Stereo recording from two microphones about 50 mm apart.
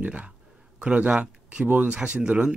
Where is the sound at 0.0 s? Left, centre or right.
Right.